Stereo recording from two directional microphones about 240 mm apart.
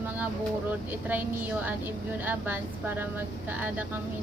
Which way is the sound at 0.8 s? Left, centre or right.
Centre.